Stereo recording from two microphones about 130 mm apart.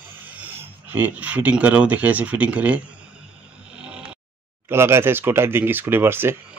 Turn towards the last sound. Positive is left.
turn(degrees=-15)  # may be behind; listen again after turning